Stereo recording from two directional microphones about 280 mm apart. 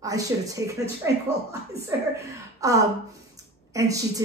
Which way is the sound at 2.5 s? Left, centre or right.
Centre.